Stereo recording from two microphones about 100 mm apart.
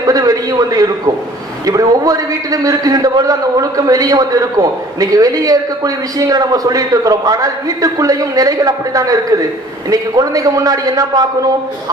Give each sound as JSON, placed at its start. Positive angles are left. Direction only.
{"t": 0.0, "sound": "a man's voice", "side_deg": -35}